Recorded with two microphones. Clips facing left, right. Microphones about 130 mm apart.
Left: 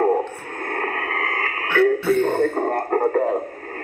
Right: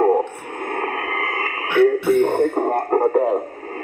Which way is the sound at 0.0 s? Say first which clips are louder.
Right 2 dB; 15° right (ahead or behind).